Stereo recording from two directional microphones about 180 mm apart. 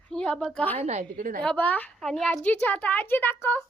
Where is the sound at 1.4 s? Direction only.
10° left (ahead or behind).